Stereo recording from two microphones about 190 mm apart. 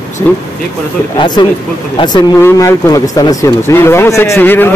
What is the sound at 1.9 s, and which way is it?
Speech, 20° left (ahead or behind).